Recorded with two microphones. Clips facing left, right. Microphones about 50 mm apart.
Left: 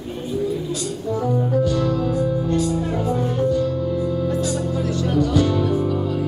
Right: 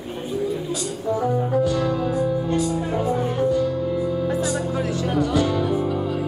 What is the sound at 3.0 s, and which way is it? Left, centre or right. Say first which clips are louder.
Music: even; centre.